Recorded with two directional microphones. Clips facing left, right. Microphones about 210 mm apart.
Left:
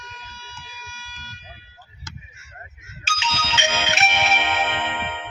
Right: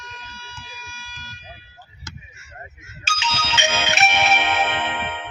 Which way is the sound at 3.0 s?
50° right (ahead or behind).